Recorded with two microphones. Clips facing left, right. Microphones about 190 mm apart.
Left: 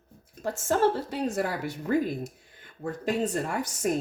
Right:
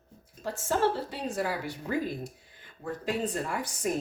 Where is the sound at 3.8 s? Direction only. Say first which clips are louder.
Left 3 dB; 50° left (ahead or behind).